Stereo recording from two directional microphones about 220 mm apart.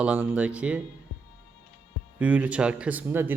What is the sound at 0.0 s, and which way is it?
Speech, 5° right (ahead or behind).